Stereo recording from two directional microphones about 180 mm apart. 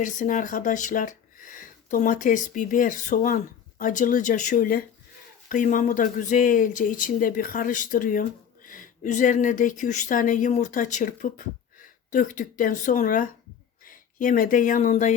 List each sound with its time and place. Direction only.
0.0 s speech: 45° left (ahead or behind)